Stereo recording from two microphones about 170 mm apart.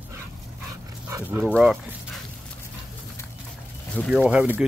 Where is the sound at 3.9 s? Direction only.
Centre (ahead or behind).